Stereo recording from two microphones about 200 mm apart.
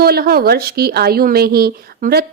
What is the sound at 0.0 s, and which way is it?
A woman's voice, 50° right (ahead or behind).